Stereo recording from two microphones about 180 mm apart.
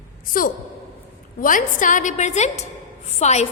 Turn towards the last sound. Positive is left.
turn(degrees=40)  # may be behind; listen again after turning